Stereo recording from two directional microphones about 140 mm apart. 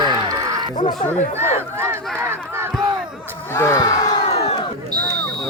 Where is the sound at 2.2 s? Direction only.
20° right (ahead or behind).